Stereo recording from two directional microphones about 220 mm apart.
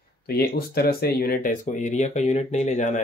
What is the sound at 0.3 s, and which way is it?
Speech, 45° left (ahead or behind).